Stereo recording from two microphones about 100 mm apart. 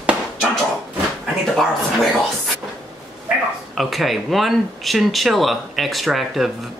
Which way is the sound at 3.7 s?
Centre (ahead or behind).